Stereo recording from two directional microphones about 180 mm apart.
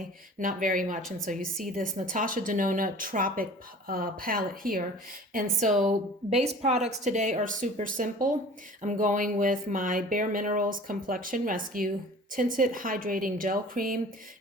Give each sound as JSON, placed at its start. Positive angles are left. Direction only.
{"t": 0.3, "sound": "speech", "side_deg": -50}
{"t": 6.3, "sound": "speech", "side_deg": -35}